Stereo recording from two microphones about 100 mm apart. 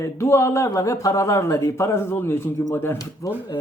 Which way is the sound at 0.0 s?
25° left (ahead or behind).